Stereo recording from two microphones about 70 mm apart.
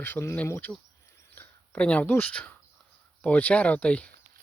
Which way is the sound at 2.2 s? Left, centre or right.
Centre.